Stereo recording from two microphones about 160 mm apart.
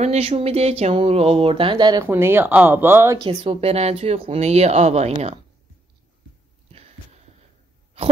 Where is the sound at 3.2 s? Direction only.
40° right (ahead or behind).